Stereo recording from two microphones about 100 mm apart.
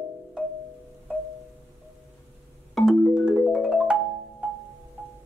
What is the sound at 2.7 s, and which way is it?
Marimba, centre (ahead or behind).